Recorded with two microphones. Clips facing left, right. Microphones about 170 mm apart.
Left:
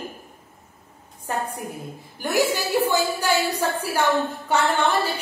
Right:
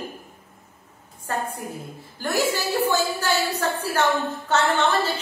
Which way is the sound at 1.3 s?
15° left (ahead or behind).